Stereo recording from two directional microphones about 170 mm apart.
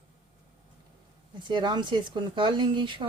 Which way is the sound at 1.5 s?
25° right (ahead or behind).